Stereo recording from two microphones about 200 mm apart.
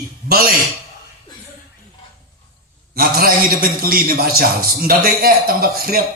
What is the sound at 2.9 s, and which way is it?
A man's voice, 45° right (ahead or behind).